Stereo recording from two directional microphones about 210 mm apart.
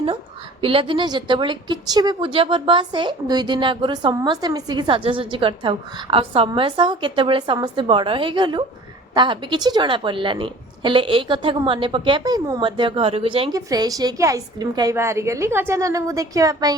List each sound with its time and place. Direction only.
0.6 s a woman's voice: 25° right (ahead or behind)